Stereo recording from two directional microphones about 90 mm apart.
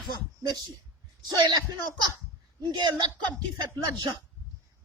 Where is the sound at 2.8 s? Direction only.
55° right (ahead or behind).